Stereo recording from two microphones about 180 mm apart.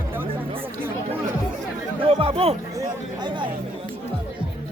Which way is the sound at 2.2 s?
30° right (ahead or behind).